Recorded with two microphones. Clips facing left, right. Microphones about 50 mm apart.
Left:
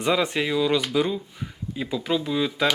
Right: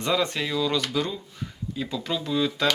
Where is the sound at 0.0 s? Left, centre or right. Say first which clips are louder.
Left 2 dB; centre.